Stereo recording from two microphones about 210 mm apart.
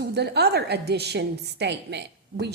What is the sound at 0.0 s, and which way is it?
A woman's voice, 50° right (ahead or behind).